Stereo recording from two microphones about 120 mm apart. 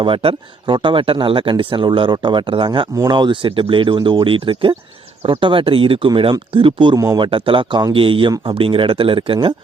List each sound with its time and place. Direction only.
0.0 s speech: 50° right (ahead or behind)
7.0 s a man's voice: 30° right (ahead or behind)
7.3 s speech: 45° right (ahead or behind)